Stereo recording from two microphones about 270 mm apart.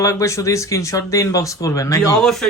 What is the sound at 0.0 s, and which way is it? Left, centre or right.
Speech, centre.